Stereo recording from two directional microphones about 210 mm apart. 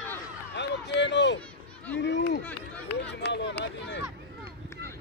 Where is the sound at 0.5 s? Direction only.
55° left (ahead or behind).